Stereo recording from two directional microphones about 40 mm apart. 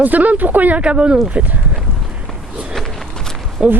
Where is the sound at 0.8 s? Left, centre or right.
Right.